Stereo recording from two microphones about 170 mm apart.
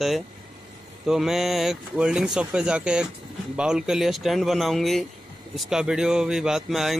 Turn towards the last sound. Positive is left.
turn(degrees=0)  # may be behind; listen again after turning